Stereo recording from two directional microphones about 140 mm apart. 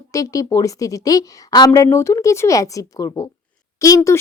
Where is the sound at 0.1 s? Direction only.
25° left (ahead or behind).